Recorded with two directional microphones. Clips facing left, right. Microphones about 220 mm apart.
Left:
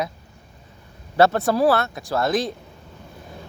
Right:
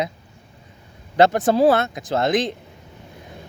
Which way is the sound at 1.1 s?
20° right (ahead or behind).